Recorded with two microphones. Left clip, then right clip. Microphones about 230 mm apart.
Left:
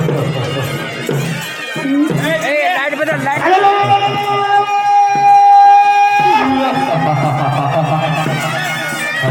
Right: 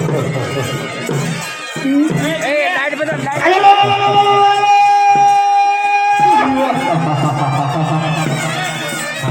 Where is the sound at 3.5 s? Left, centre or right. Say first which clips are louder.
Right 2 dB; right.